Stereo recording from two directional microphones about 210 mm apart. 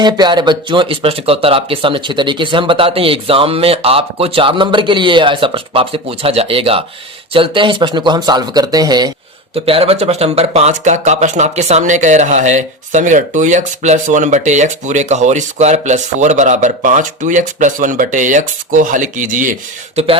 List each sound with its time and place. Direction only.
0.0 s speech: 20° right (ahead or behind); by 19.5 s 40° right (ahead or behind)